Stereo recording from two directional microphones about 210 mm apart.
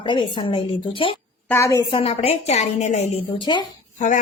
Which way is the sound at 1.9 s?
30° left (ahead or behind).